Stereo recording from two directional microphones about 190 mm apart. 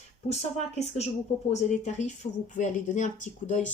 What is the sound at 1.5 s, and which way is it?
Speech, 40° left (ahead or behind).